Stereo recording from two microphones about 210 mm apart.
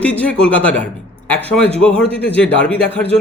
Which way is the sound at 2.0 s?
30° right (ahead or behind).